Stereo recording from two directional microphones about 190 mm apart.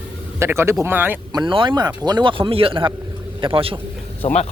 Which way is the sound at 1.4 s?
25° right (ahead or behind).